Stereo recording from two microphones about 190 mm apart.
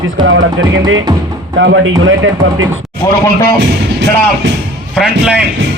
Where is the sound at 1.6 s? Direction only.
80° right.